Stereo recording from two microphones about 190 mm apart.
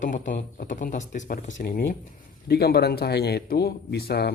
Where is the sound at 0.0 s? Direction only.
45° left (ahead or behind).